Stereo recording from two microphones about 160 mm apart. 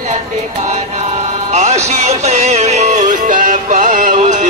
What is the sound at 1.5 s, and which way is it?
Music, 45° right (ahead or behind).